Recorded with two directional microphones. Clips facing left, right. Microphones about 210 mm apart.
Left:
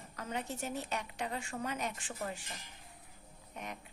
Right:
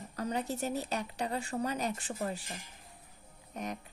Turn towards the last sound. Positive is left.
turn(degrees=-40)  # may be behind; listen again after turning